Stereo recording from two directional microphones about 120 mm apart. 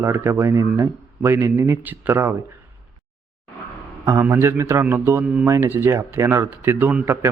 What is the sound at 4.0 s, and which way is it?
A man's voice, 20° right (ahead or behind).